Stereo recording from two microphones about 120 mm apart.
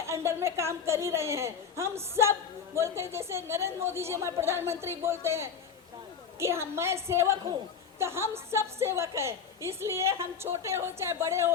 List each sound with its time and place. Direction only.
0.0 s a woman's voice: 25° right (ahead or behind)